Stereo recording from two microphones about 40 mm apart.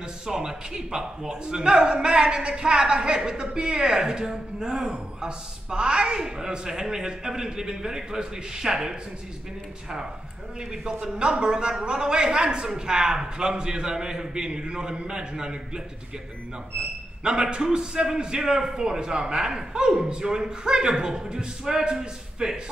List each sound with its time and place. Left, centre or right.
0.3 s a man's voice: centre
10.7 s a man's voice: centre
17.5 s a man's voice: right